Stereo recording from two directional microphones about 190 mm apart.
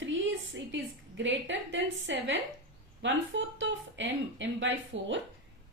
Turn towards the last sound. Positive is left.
turn(degrees=-75)  # may be behind; listen again after turning